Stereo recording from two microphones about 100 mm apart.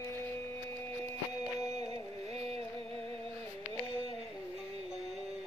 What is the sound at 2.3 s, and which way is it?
Music, 90° right.